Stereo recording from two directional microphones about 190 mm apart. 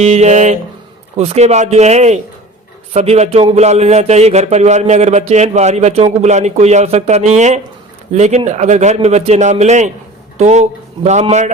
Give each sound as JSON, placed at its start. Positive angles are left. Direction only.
{"t": 0.0, "sound": "a man's voice", "side_deg": -35}